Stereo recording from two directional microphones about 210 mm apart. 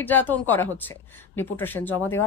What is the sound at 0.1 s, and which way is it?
Speech, 10° left (ahead or behind).